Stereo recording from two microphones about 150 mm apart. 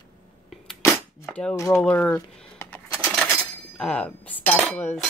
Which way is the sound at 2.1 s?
15° left (ahead or behind).